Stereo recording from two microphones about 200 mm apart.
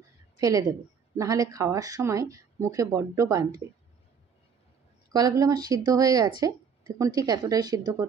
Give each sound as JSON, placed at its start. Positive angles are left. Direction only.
{"t": 0.4, "sound": "a woman's voice", "side_deg": -15}
{"t": 5.1, "sound": "a woman's voice", "side_deg": -20}